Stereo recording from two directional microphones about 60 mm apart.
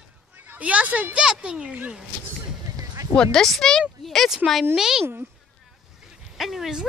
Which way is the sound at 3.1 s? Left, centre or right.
Centre.